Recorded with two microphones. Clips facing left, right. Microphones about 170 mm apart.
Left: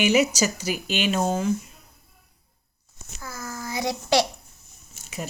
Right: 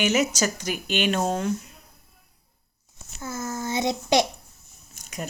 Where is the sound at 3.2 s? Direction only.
25° right (ahead or behind).